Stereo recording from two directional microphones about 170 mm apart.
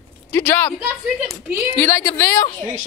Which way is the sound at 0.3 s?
10° left (ahead or behind).